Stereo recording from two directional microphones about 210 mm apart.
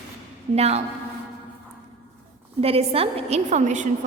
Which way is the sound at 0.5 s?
30° right (ahead or behind).